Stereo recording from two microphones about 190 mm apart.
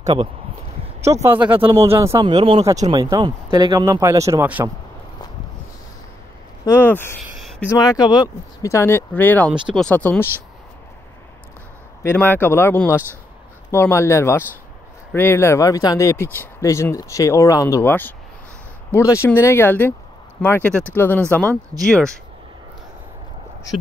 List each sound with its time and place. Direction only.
0.0 s speech: 30° right (ahead or behind)
1.0 s speech: 15° right (ahead or behind)
2.2 s speech: 25° right (ahead or behind); by 4.6 s 10° right (ahead or behind)
6.6 s speech: 10° left (ahead or behind)
7.2 s a sound: centre (ahead or behind)
7.7 s speech: 20° left (ahead or behind)
12.0 s speech: 10° left (ahead or behind)